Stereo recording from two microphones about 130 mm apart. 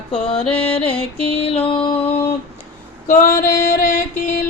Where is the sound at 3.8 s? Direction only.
85° left.